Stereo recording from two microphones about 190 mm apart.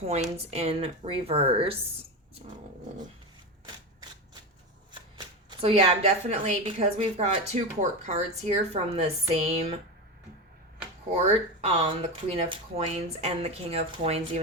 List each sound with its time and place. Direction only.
0.0 s speech: 35° right (ahead or behind)
4.9 s speech: 25° right (ahead or behind)
11.1 s speech: 35° right (ahead or behind)